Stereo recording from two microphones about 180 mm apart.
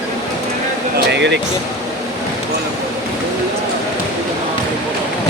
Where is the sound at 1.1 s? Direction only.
75° right (ahead or behind).